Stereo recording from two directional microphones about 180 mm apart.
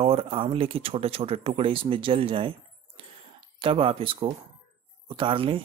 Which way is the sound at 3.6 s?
30° right (ahead or behind).